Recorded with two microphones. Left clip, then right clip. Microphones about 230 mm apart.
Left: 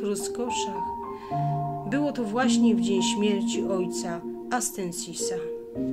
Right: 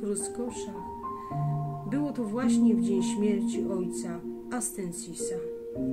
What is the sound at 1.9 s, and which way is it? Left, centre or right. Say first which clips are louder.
Speech: left 3 dB; centre.